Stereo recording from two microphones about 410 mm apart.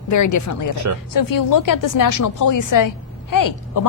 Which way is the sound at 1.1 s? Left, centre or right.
Left.